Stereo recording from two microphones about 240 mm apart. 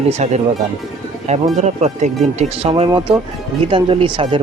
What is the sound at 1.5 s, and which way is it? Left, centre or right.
Speech, right.